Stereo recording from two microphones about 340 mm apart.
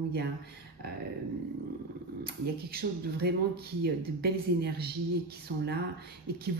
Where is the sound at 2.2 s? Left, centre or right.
Right.